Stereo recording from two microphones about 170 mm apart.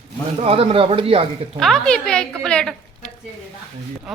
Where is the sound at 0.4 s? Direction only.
35° right (ahead or behind).